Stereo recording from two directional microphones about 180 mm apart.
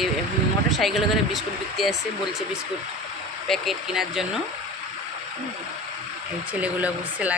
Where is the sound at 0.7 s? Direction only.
Centre (ahead or behind).